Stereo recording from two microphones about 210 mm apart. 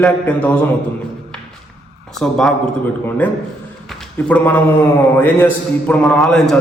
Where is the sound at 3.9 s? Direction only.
10° left (ahead or behind).